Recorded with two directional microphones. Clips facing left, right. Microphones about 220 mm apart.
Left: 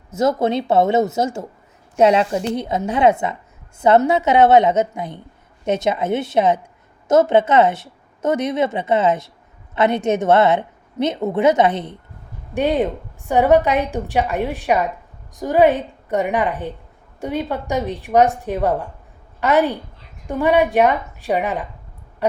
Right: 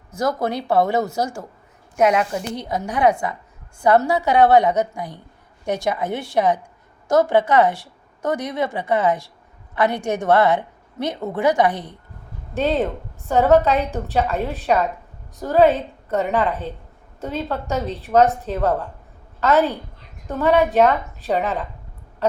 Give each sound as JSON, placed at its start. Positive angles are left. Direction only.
{"t": 0.1, "sound": "a woman's voice", "side_deg": 25}
{"t": 22.2, "sound": "owl", "side_deg": 15}